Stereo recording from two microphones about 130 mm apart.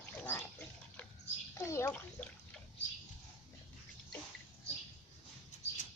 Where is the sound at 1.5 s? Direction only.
20° left (ahead or behind).